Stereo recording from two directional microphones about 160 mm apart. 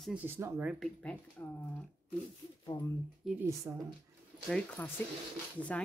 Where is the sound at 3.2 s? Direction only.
10° right (ahead or behind).